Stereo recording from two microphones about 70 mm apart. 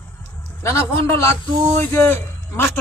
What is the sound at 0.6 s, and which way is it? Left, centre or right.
A man's voice, left.